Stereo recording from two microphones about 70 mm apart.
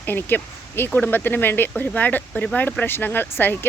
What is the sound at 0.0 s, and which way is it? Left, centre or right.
Speech, left.